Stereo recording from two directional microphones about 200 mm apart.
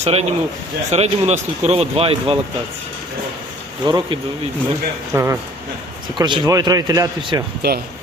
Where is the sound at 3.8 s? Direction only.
20° right (ahead or behind).